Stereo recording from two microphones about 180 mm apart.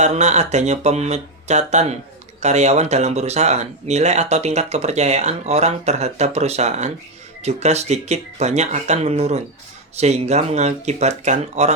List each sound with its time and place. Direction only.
0.0 s speech: 40° right (ahead or behind)